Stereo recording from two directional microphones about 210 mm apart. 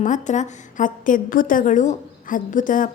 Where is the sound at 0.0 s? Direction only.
35° left (ahead or behind).